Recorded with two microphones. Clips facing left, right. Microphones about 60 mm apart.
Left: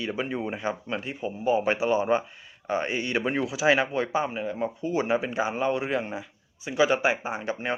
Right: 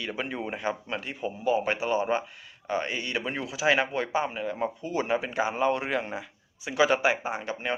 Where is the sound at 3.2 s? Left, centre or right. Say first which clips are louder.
Left 3 dB; centre.